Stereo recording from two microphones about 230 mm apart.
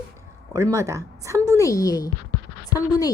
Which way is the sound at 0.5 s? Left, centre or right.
Centre.